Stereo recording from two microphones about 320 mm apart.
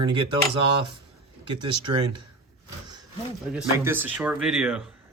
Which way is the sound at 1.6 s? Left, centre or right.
Centre.